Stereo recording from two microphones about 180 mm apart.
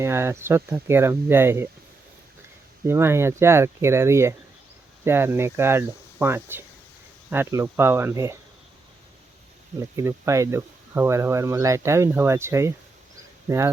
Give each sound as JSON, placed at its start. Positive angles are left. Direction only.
{"t": 0.0, "sound": "speech", "side_deg": -15}
{"t": 2.8, "sound": "speech", "side_deg": -15}
{"t": 9.9, "sound": "speech", "side_deg": -15}